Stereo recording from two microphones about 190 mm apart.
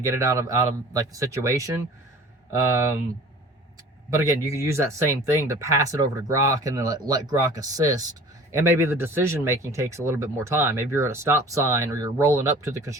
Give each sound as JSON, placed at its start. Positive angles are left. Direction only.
{"t": 0.0, "sound": "speech", "side_deg": -15}
{"t": 4.3, "sound": "speech", "side_deg": -15}